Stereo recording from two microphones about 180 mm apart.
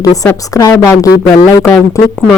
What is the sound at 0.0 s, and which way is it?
A woman's voice, 20° left (ahead or behind).